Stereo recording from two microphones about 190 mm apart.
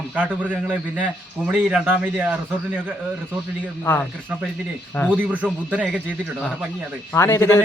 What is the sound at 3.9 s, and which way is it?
Speech, 10° left (ahead or behind).